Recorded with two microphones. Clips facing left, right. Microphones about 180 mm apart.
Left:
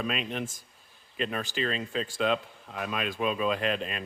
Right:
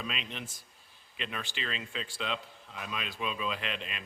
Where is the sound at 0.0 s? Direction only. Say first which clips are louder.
Left 8 dB; 50° left (ahead or behind).